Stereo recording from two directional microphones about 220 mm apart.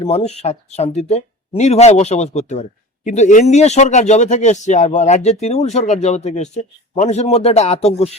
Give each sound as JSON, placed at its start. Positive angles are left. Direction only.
{"t": 0.0, "sound": "speech", "side_deg": 30}